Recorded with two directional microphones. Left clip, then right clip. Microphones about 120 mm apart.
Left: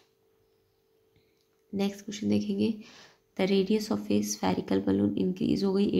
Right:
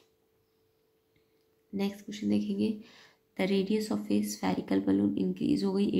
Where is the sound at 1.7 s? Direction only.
25° left (ahead or behind).